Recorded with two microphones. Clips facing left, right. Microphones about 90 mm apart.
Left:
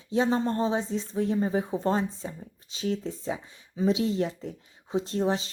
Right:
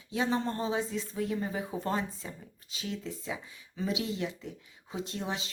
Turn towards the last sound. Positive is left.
turn(degrees=35)  # may be behind; listen again after turning